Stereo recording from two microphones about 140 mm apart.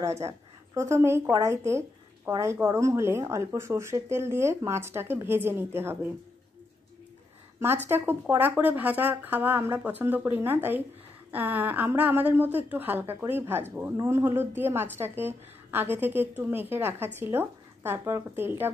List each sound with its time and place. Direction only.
0.0 s a woman's voice: 20° right (ahead or behind)
7.6 s a woman's voice: 15° right (ahead or behind)